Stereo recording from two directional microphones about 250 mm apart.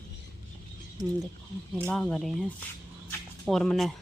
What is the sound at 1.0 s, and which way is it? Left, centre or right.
Speech, centre.